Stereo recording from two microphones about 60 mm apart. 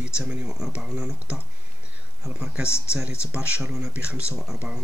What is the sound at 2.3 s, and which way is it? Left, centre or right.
Speech, centre.